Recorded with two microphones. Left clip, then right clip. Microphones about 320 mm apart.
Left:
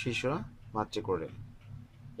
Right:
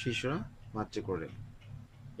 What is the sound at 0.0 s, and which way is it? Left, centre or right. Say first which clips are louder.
Speech: left 2 dB; centre.